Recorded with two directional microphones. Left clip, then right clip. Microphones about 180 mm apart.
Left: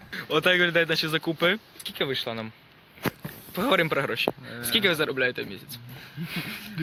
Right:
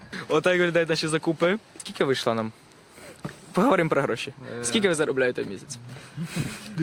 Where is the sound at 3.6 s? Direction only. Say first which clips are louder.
Right 2 dB; 45° right (ahead or behind); by 5.8 s 25° right (ahead or behind).